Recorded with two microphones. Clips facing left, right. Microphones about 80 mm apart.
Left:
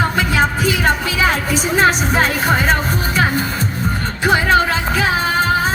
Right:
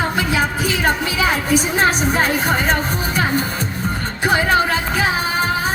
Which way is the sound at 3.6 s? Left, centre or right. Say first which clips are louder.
Left 2 dB; left.